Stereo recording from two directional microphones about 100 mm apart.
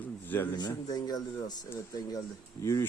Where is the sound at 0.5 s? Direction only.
45° left (ahead or behind).